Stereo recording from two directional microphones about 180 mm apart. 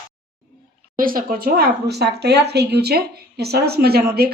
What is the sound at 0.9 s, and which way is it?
Speech, 50° right (ahead or behind).